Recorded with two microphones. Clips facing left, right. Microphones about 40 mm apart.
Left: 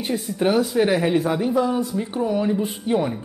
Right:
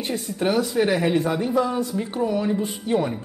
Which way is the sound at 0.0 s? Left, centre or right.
Centre.